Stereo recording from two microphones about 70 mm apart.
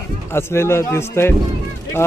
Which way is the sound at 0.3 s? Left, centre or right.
Left.